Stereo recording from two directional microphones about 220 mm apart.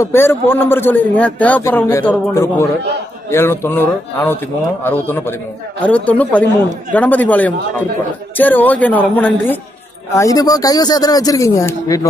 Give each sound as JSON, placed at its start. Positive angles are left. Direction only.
{"t": 0.0, "sound": "a man's voice", "side_deg": 10}